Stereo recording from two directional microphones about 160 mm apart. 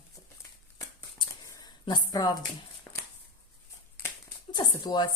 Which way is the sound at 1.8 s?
25° left (ahead or behind).